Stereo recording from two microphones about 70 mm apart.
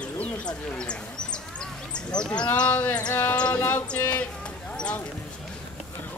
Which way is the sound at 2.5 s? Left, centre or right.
Left.